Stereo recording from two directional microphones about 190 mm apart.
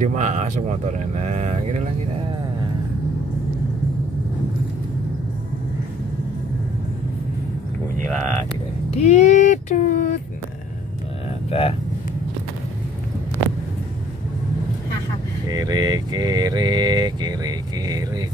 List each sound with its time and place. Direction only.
0.0 s speech: 40° right (ahead or behind)
8.1 s speech: 10° left (ahead or behind)
8.9 s child singing: 35° left (ahead or behind)
11.5 s child singing: 30° left (ahead or behind)
15.5 s mantra: 20° right (ahead or behind)